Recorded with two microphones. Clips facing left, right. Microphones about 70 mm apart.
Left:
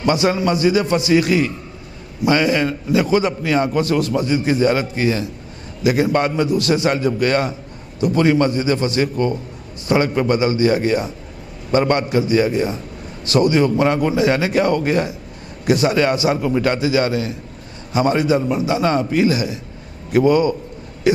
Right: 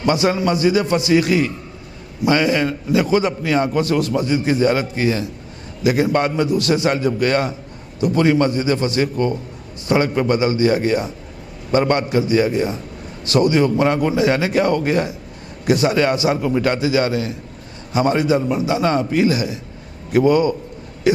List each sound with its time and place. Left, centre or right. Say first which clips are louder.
0.0 s a man's voice: even; centre